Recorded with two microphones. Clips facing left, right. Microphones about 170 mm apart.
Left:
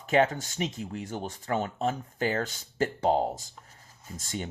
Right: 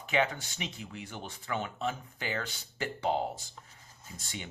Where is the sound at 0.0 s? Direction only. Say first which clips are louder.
Left 6 dB; 45° left (ahead or behind).